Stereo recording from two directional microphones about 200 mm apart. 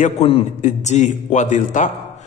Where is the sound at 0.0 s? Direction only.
35° left (ahead or behind).